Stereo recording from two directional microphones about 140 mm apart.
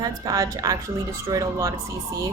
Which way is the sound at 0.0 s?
25° right (ahead or behind).